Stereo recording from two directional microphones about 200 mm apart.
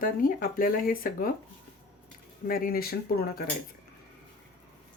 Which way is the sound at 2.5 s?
45° left (ahead or behind).